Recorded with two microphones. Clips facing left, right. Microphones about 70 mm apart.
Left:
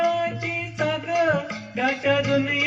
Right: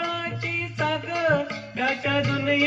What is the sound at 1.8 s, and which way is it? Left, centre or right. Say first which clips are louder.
Music: left 3 dB; centre.